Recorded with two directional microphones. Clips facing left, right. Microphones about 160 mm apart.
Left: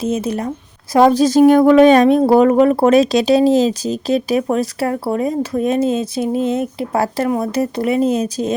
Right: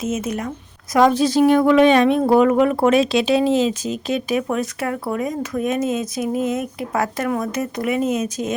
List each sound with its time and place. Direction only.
0.0 s speech: 35° left (ahead or behind)